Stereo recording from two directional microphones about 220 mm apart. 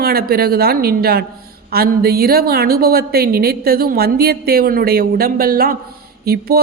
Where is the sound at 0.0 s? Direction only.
45° right (ahead or behind).